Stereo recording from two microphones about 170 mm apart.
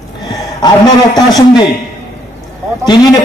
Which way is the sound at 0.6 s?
25° left (ahead or behind).